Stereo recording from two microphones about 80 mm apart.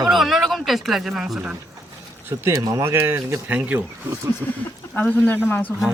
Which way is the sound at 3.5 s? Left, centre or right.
Centre.